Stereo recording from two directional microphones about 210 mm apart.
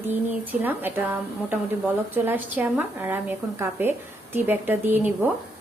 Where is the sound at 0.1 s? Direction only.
10° right (ahead or behind).